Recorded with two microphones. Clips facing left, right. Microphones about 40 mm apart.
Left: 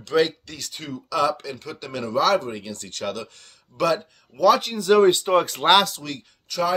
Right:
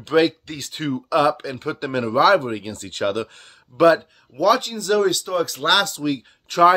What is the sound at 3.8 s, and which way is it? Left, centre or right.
Speech, right.